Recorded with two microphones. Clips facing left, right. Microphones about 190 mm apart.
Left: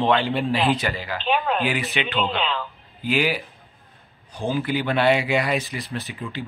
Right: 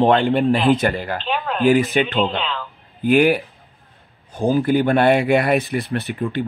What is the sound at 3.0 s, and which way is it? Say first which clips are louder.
Speech: right 8 dB; 55° right (ahead or behind).